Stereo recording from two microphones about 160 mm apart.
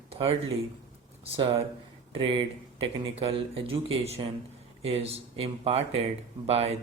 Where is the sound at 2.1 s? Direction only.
35° right (ahead or behind).